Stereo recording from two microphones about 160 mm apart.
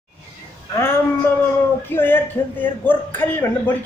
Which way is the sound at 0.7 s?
15° left (ahead or behind).